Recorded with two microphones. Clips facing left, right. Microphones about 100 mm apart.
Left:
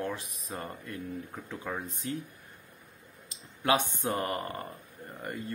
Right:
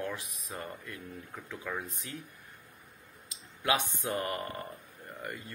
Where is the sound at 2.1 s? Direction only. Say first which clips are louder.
Left 8 dB; 35° left (ahead or behind).